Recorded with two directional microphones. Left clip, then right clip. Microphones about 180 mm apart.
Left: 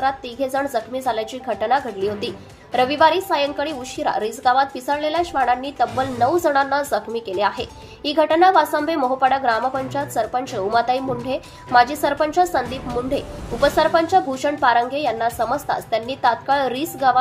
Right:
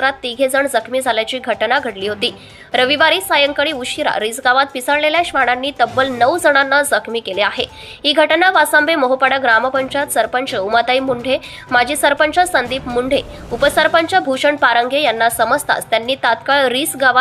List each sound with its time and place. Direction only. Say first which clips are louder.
0.0 s a woman's voice: right 6 dB; 20° right (ahead or behind)